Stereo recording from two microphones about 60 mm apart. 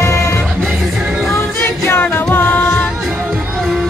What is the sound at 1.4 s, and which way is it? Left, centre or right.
Music, left.